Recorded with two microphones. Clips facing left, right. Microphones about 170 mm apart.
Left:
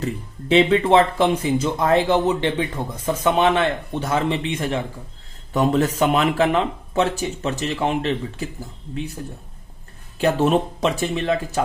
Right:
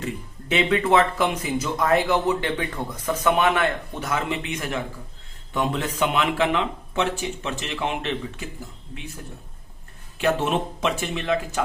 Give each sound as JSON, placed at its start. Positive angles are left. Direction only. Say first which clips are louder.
{"t": 0.0, "sound": "speech", "louder": "left 4 dB", "side_deg": 30}
{"t": 5.5, "sound": "speech", "louder": "left 6 dB", "side_deg": 40}
{"t": 10.2, "sound": "speech", "louder": "left 4 dB", "side_deg": 40}